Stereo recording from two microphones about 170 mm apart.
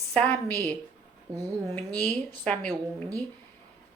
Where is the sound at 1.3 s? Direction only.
20° right (ahead or behind).